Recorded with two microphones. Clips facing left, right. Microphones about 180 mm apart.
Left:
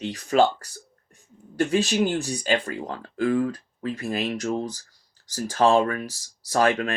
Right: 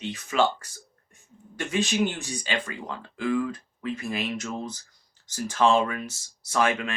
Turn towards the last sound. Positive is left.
turn(degrees=40)  # may be behind; listen again after turning